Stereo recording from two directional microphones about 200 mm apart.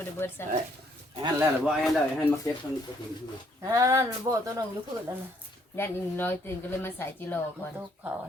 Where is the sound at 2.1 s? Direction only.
15° left (ahead or behind).